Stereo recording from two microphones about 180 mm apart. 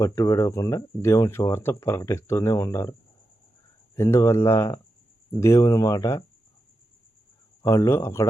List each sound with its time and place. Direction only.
0.0 s speech: 15° left (ahead or behind)
3.9 s speech: 15° left (ahead or behind)
7.6 s speech: 15° left (ahead or behind)